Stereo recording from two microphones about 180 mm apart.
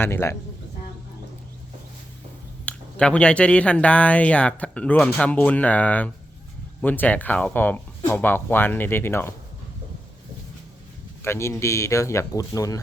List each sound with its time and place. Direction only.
0.0 s speech: 15° left (ahead or behind)
2.6 s speech: 5° left (ahead or behind)
11.2 s speech: 15° left (ahead or behind)